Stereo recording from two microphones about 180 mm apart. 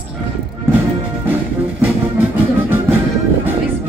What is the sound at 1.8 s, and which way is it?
Music, 10° right (ahead or behind).